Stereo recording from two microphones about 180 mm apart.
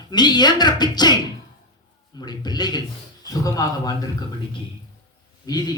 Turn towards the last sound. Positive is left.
turn(degrees=20)  # may be behind; listen again after turning